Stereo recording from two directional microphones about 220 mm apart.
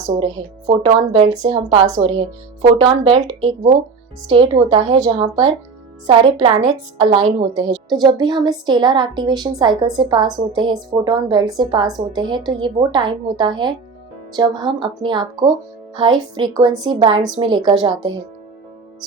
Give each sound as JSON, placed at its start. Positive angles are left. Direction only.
{"t": 0.8, "sound": "a woman's voice", "side_deg": -25}